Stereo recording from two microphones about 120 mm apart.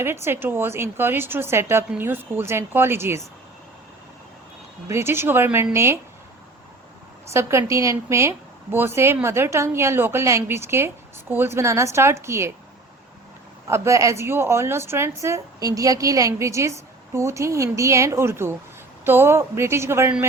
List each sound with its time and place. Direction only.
0.0 s speech: 20° right (ahead or behind)
4.9 s speech: 20° right (ahead or behind)
7.3 s speech: 25° right (ahead or behind)
13.7 s speech: 25° right (ahead or behind)